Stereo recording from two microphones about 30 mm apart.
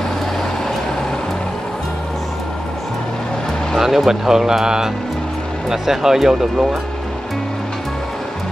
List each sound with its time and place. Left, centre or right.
3.8 s speech: centre